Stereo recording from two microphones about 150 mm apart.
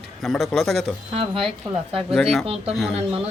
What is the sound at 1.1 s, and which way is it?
Speech, 35° right (ahead or behind).